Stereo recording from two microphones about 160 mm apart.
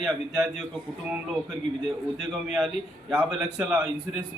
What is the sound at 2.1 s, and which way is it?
A man's voice, centre (ahead or behind).